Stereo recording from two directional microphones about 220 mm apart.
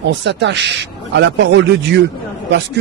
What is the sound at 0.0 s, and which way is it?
Speech, 55° right (ahead or behind).